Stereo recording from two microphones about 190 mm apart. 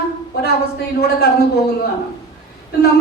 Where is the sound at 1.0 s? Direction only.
55° left (ahead or behind).